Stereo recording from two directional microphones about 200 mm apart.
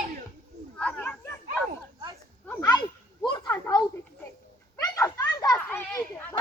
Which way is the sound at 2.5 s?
15° left (ahead or behind).